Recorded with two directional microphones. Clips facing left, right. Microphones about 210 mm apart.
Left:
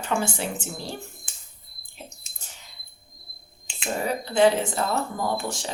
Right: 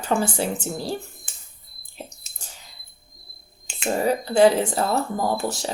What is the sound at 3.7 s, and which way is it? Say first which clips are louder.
Finger snapping: right 6 dB; 45° right (ahead or behind).